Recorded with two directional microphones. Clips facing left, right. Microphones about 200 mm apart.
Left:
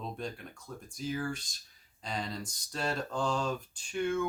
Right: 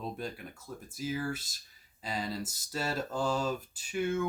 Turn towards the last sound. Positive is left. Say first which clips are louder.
# even
turn(degrees=-5)  # may be behind; listen again after turning